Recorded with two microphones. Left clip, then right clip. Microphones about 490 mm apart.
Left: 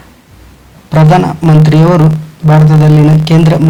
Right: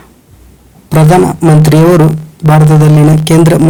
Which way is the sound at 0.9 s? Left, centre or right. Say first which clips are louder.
Right 1 dB; right.